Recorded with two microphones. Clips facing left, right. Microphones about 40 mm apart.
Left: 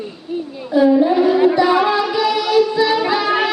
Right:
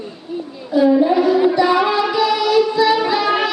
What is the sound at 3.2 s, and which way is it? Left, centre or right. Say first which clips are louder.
Music: even; centre.